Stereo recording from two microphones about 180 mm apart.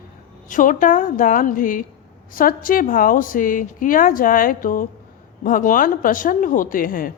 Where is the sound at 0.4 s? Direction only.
45° left (ahead or behind).